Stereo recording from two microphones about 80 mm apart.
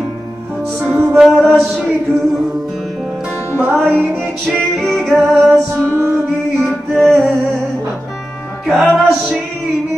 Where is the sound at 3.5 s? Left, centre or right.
Right.